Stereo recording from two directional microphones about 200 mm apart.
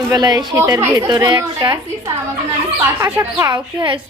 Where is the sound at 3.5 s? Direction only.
25° right (ahead or behind).